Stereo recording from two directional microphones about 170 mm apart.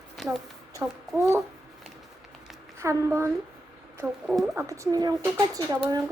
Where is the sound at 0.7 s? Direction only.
15° right (ahead or behind).